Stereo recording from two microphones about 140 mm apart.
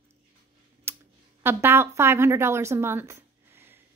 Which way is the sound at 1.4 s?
15° right (ahead or behind).